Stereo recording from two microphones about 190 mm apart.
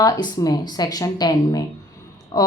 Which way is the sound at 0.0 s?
20° left (ahead or behind).